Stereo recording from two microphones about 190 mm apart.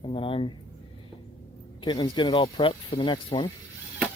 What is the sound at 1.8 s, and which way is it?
Speech, 25° left (ahead or behind).